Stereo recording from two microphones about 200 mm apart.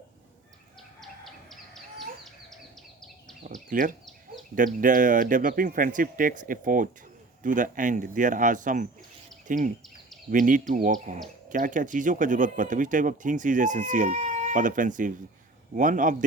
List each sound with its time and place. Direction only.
1.0 s chicken: centre (ahead or behind)
3.4 s bird: 40° right (ahead or behind)
4.5 s speech: 40° right (ahead or behind)